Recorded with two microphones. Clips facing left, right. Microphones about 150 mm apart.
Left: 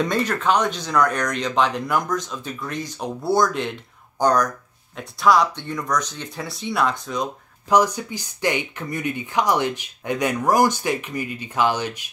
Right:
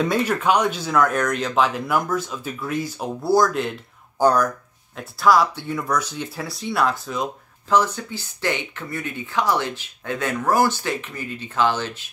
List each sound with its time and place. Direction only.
0.0 s speech: 10° right (ahead or behind)
7.7 s speech: 15° left (ahead or behind)